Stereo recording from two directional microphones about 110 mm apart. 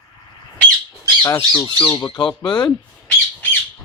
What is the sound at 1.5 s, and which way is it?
Speech, 40° left (ahead or behind).